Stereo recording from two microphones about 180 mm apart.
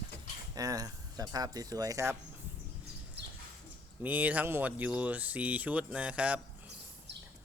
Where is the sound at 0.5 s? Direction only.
20° right (ahead or behind).